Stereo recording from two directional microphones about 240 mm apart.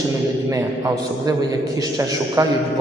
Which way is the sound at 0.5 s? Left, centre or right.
Centre.